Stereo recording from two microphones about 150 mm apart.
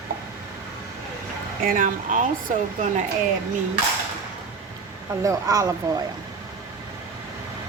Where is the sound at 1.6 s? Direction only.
60° right (ahead or behind).